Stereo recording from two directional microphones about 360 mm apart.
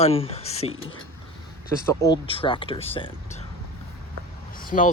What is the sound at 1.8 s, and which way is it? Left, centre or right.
Speech, centre.